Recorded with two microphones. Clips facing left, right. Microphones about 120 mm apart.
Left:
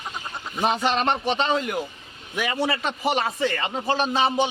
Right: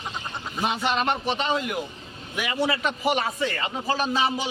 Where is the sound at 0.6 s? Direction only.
35° left (ahead or behind).